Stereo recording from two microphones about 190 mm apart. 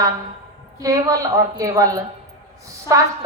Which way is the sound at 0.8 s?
15° right (ahead or behind).